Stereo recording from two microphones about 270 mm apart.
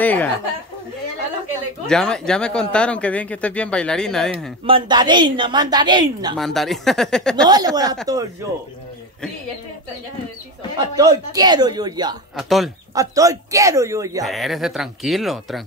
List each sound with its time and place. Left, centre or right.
0.0 s speech: centre
1.9 s speech: centre
4.6 s a woman's voice: centre
6.3 s speech: centre
7.4 s a woman's voice: centre
11.0 s a woman's voice: centre
12.4 s speech: centre
12.9 s a woman's voice: centre
14.2 s speech: centre